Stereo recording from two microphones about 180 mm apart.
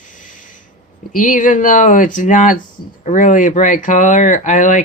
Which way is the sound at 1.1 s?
50° left (ahead or behind).